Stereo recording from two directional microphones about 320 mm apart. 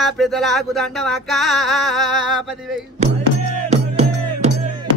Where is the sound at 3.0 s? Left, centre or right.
Right.